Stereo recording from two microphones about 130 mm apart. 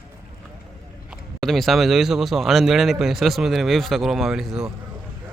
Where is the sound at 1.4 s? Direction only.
Centre (ahead or behind).